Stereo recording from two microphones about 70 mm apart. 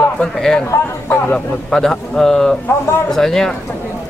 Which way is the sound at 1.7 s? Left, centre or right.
Centre.